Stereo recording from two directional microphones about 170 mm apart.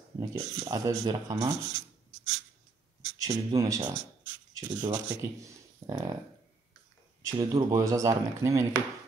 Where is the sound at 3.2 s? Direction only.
20° right (ahead or behind).